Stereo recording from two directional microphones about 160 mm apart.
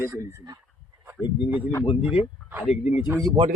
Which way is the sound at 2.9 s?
15° right (ahead or behind).